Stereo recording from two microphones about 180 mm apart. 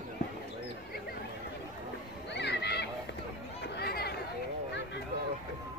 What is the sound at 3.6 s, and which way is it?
Chatter, 60° left (ahead or behind).